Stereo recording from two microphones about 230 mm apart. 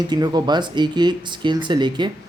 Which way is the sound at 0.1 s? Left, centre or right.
Centre.